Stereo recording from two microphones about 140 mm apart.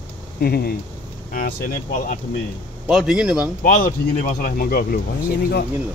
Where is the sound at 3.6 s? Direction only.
75° left (ahead or behind); by 5.6 s 90° left.